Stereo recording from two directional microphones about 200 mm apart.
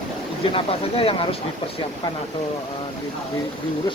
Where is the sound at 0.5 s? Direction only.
25° left (ahead or behind).